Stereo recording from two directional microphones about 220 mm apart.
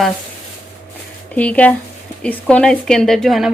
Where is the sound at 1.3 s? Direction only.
5° left (ahead or behind).